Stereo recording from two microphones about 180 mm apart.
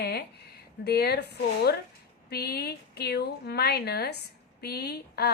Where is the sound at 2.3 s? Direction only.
60° left (ahead or behind).